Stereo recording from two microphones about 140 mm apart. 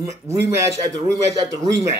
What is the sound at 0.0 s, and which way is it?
Speech, 20° right (ahead or behind).